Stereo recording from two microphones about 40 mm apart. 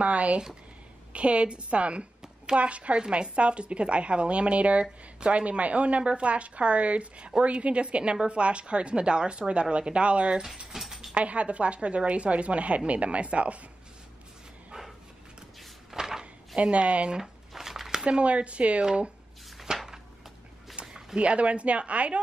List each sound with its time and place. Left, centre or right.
0.0 s a woman's voice: right
10.7 s mechanisms: centre
11.1 s a woman's voice: right
15.9 s a sound: centre
16.5 s a woman's voice: right
17.2 s a sound: centre
18.0 s a woman's voice: right
19.7 s a sound: centre
21.2 s a woman's voice: right